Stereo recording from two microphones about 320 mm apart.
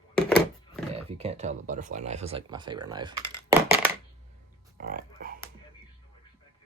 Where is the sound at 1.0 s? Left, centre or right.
Centre.